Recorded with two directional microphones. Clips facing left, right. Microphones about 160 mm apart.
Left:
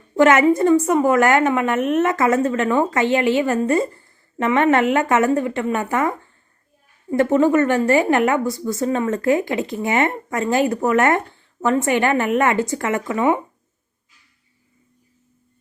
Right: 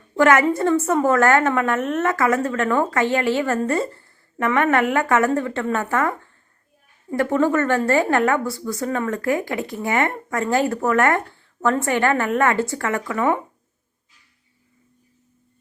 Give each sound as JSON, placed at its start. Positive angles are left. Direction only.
{"t": 0.2, "sound": "a woman's voice", "side_deg": 20}